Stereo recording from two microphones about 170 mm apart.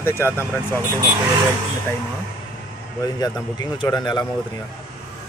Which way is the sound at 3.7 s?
25° left (ahead or behind).